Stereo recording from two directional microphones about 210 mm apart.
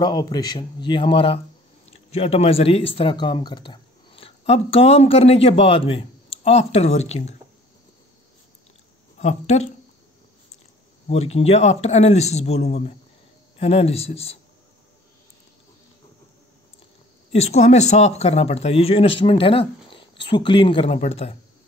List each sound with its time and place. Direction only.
0.0 s speech: 20° left (ahead or behind)
9.2 s speech: 30° left (ahead or behind)
11.1 s speech: 30° left (ahead or behind)
17.3 s speech: 30° left (ahead or behind)